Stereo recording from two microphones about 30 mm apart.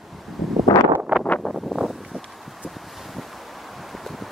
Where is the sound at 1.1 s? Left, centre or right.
Right.